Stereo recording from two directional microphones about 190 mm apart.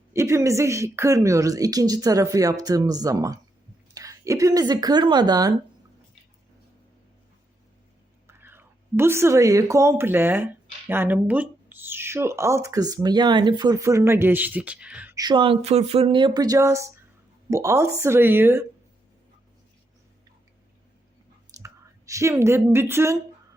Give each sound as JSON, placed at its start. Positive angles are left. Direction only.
{"t": 0.1, "sound": "speech", "side_deg": -15}
{"t": 8.3, "sound": "speech", "side_deg": -10}
{"t": 15.1, "sound": "speech", "side_deg": -20}
{"t": 21.6, "sound": "a woman's voice", "side_deg": -15}